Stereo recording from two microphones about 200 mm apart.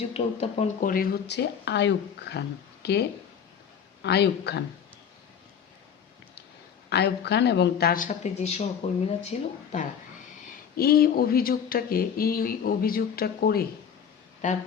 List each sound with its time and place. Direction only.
0.1 s speech: 30° left (ahead or behind); by 4.6 s 55° left (ahead or behind)
6.9 s speech: 55° left (ahead or behind); by 9.5 s 35° left (ahead or behind)
10.8 s speech: 50° left (ahead or behind)